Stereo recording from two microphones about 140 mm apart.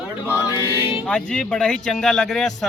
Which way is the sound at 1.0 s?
5° left (ahead or behind).